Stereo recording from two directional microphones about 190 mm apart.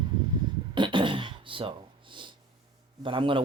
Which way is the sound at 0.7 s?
25° right (ahead or behind).